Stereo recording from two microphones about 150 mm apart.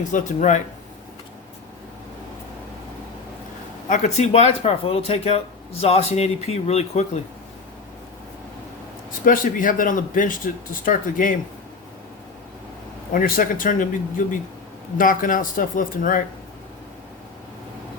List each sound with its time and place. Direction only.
0.1 s speech: 55° left (ahead or behind)
3.8 s speech: 50° left (ahead or behind)
9.2 s speech: 65° left (ahead or behind)
13.1 s speech: 70° left (ahead or behind)